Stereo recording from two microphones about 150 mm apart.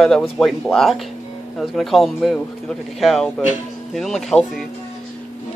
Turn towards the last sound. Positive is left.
turn(degrees=0)  # may be behind; listen again after turning